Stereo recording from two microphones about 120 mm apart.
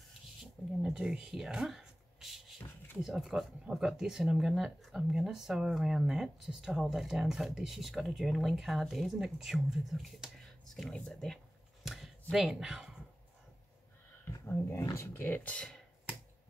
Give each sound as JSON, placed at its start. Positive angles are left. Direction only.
{"t": 0.4, "sound": "speech", "side_deg": -5}
{"t": 11.8, "sound": "a sound", "side_deg": -5}
{"t": 14.4, "sound": "speech", "side_deg": 20}